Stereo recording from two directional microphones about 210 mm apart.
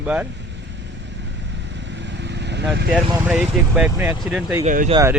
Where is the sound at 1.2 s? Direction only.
55° right (ahead or behind).